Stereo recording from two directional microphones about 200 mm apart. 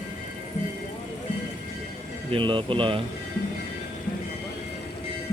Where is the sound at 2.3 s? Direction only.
25° right (ahead or behind).